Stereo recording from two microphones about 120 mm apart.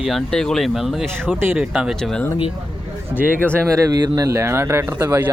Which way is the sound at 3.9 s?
30° right (ahead or behind).